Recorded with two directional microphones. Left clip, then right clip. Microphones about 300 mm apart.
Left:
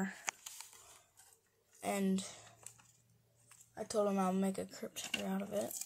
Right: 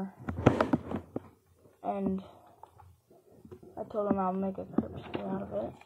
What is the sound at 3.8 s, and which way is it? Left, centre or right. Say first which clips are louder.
Speech: right 4 dB; centre.